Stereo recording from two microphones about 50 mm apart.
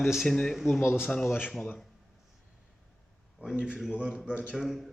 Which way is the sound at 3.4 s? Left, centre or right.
Right.